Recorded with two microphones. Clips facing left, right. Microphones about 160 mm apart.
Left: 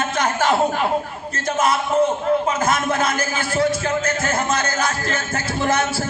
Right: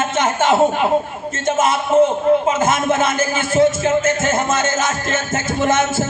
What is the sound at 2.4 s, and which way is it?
A man's voice, 25° right (ahead or behind).